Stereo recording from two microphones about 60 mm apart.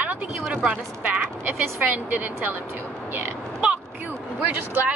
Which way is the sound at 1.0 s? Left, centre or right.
Right.